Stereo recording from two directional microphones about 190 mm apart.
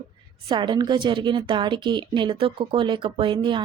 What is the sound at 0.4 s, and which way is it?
Speech, 25° right (ahead or behind).